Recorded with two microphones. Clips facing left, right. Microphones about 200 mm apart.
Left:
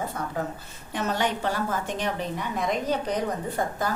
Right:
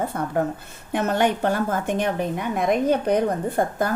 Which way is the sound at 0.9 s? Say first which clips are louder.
Right 6 dB; 55° right (ahead or behind).